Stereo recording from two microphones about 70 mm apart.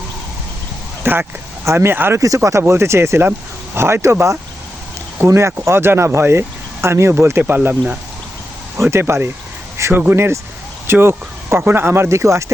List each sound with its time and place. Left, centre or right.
1.0 s speech: right
2.2 s speech: right
8.8 s speech: right